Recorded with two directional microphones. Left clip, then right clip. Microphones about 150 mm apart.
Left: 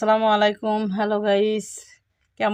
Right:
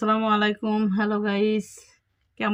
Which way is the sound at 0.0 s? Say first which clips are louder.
Left 5 dB; 90° left.